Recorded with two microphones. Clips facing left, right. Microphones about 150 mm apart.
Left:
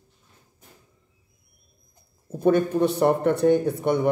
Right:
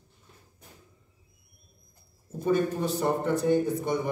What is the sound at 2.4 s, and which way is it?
A man's voice, 65° left (ahead or behind).